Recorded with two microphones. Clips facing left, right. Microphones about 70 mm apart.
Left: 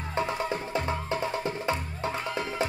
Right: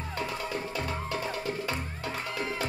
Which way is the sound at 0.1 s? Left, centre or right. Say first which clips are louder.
Left 5 dB; left.